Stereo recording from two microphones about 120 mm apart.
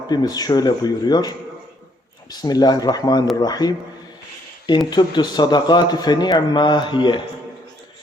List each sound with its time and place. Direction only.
0.1 s a man's voice: 35° left (ahead or behind)
2.3 s a man's voice: 35° left (ahead or behind)
4.9 s a man's voice: 40° left (ahead or behind)